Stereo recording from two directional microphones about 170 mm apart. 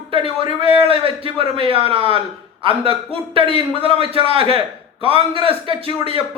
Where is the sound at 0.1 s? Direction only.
30° right (ahead or behind).